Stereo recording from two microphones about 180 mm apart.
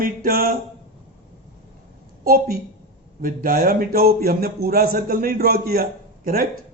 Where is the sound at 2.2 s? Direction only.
55° right (ahead or behind).